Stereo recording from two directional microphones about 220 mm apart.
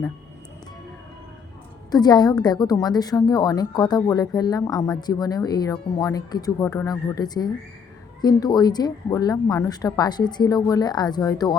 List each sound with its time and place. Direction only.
1.9 s speech: 20° left (ahead or behind)